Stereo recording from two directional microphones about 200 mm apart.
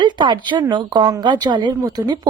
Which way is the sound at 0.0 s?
25° right (ahead or behind).